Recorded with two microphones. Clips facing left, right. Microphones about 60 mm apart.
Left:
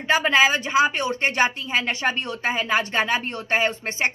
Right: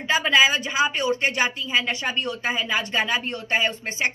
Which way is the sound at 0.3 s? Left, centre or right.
Left.